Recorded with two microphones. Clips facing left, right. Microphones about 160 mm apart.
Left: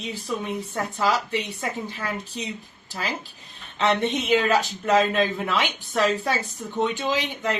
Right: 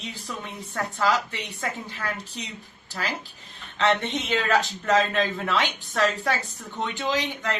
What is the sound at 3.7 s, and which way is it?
Speech, 15° left (ahead or behind).